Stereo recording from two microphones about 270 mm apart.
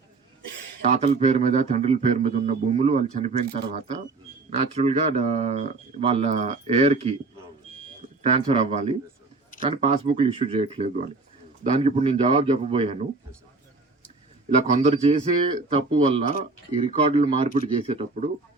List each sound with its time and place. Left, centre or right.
0.8 s a man's voice: right
8.4 s a man's voice: right
14.5 s a man's voice: right